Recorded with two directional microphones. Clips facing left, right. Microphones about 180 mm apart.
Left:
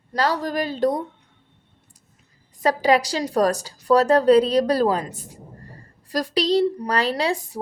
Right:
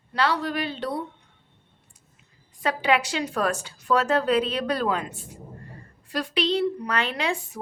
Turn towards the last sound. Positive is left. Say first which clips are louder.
# left 5 dB
turn(degrees=35)  # may be behind; listen again after turning